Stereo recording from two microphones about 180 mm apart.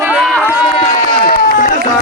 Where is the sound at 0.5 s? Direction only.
5° right (ahead or behind).